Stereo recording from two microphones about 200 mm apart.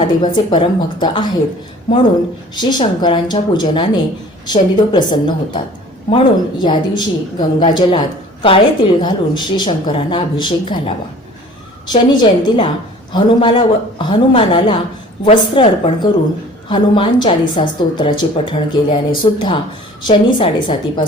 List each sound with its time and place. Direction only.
0.2 s a woman's voice: 25° left (ahead or behind)
2.6 s a woman's voice: 20° left (ahead or behind)